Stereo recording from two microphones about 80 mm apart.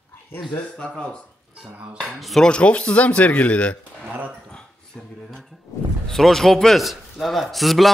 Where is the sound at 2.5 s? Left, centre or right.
Centre.